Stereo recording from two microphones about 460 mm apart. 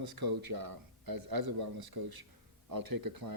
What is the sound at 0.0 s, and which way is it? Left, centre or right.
A man's voice, right.